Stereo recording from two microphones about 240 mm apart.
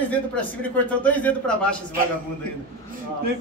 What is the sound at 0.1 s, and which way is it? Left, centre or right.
A man's voice, centre.